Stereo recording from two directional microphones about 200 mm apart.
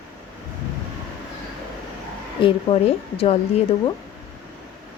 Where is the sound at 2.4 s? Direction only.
25° left (ahead or behind).